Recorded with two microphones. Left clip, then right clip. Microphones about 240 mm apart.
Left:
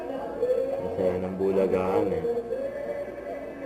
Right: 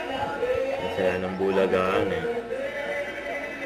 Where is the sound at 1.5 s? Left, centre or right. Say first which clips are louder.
Right 2 dB; right.